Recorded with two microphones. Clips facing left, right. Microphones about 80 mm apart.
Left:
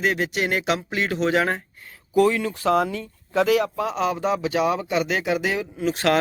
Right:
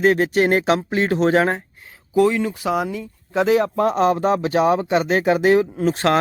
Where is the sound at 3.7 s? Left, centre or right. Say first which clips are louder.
Right 7 dB; right.